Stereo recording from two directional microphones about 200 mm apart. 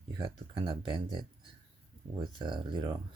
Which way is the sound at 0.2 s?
25° right (ahead or behind).